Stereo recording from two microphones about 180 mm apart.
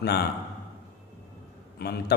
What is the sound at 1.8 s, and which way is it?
Speech, 65° left (ahead or behind).